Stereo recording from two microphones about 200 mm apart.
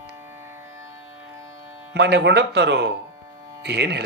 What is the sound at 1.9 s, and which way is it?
Speech, 55° right (ahead or behind).